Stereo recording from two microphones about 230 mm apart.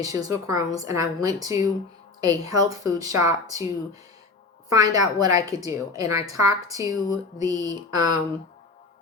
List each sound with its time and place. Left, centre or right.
0.0 s a woman's voice: centre
4.7 s a woman's voice: centre